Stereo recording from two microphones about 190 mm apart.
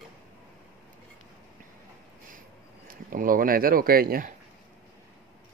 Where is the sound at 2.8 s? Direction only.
50° right (ahead or behind).